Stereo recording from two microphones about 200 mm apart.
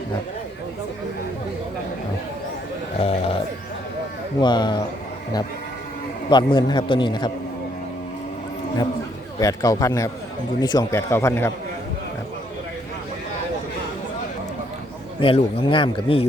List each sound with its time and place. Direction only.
3.0 s a man's voice: 30° left (ahead or behind)
4.4 s a man's voice: 20° left (ahead or behind)
6.3 s a man's voice: 25° left (ahead or behind)
9.4 s speech: 15° left (ahead or behind)
15.2 s a man's voice: 25° left (ahead or behind)